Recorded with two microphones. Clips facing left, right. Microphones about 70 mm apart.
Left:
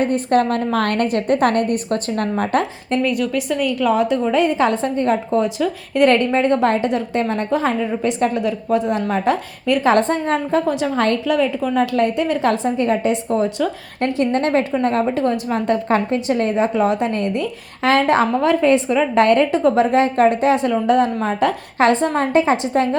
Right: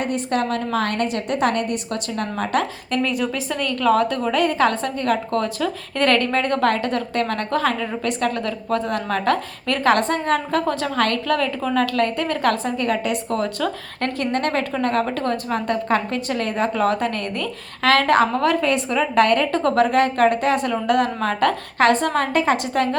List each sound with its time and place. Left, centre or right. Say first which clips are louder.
0.0 s a woman's voice: left 6 dB; left
3.0 s a woman's voice: left 3 dB; centre
9.8 s a woman's voice: left 1 dB; left
10.7 s a woman's voice: left 3 dB; centre
10.9 s a woman's voice: left 2 dB; left
11.3 s a woman's voice: left 3 dB; centre